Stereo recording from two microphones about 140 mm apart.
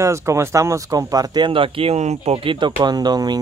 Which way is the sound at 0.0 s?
20° right (ahead or behind).